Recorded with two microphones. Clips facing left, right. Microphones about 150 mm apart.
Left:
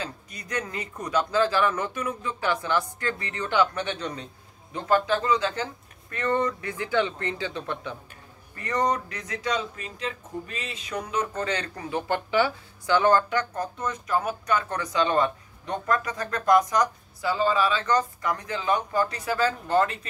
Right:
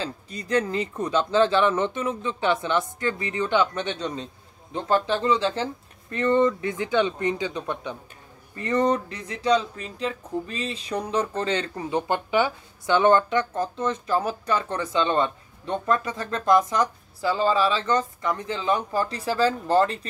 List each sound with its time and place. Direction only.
0.0 s speech: 30° right (ahead or behind)